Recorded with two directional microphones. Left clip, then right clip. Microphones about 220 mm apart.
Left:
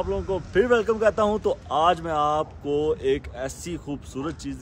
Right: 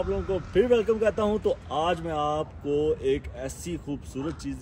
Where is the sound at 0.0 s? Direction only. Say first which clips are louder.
Left 2 dB; 10° left (ahead or behind).